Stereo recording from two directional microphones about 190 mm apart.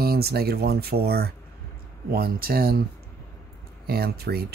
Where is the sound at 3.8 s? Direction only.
55° right (ahead or behind).